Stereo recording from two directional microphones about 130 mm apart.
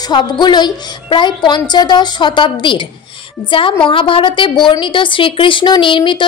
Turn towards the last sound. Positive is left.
turn(degrees=40)  # may be behind; listen again after turning